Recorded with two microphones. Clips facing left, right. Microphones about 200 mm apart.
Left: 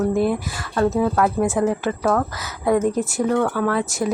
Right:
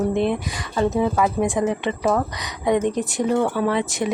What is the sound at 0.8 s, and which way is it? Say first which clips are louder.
Speech: left 1 dB; centre (ahead or behind).